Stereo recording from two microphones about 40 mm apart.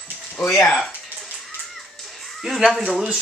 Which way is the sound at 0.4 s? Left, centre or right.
Left.